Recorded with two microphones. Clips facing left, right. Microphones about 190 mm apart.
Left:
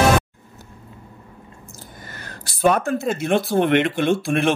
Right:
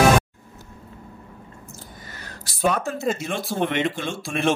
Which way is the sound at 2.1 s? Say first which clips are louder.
Left 2 dB; 55° left (ahead or behind).